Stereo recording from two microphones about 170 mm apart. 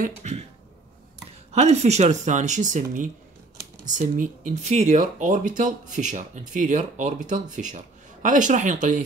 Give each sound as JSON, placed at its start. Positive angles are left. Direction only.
{"t": 0.2, "sound": "speech", "side_deg": -40}
{"t": 1.5, "sound": "speech", "side_deg": -40}